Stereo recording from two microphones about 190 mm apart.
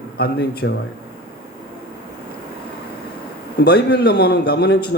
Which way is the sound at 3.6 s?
60° left (ahead or behind).